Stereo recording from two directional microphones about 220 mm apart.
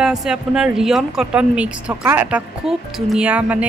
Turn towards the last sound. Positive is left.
turn(degrees=-5)  # may be behind; listen again after turning